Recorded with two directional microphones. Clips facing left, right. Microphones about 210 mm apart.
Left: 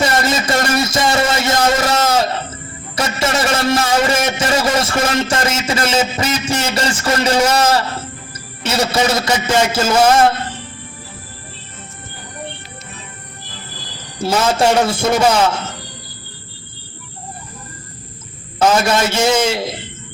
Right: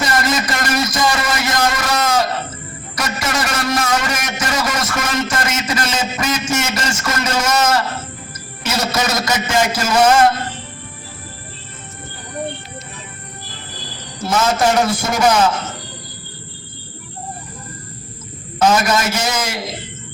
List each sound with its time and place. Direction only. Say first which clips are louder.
0.0 s a sound: left 2 dB; 25° left (ahead or behind)
2.9 s a man's voice: left 4 dB; 25° left (ahead or behind)
14.2 s a man's voice: left 2 dB; 30° left (ahead or behind)
18.8 s a man's voice: left 3 dB; 30° left (ahead or behind)